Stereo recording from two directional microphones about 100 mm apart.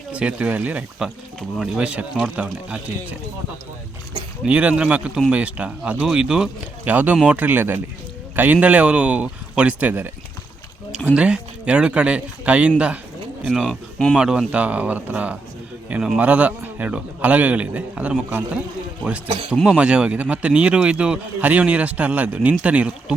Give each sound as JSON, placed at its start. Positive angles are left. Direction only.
{"t": 0.1, "sound": "speech", "side_deg": -10}
{"t": 4.4, "sound": "speech", "side_deg": -15}
{"t": 11.1, "sound": "speech", "side_deg": -10}
{"t": 13.5, "sound": "speech", "side_deg": 0}
{"t": 14.2, "sound": "speech", "side_deg": -10}
{"t": 19.6, "sound": "speech", "side_deg": -10}